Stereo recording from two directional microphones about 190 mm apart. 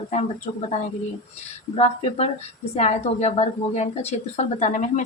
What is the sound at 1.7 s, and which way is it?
A woman's voice, 35° left (ahead or behind).